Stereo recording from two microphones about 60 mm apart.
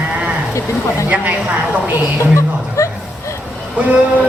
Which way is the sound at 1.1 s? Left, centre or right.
Right.